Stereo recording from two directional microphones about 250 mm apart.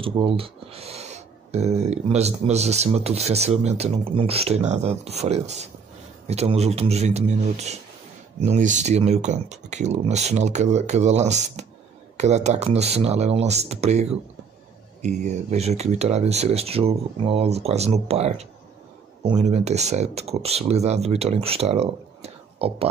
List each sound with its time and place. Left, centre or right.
0.0 s speech: right